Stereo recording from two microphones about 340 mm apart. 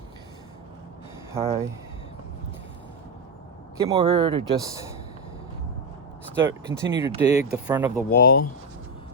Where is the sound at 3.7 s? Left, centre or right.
Centre.